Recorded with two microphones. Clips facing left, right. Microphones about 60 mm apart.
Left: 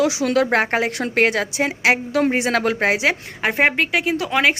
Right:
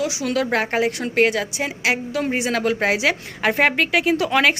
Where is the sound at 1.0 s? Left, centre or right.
Left.